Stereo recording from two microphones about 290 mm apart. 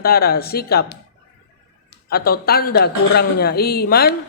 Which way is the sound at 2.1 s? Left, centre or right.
Left.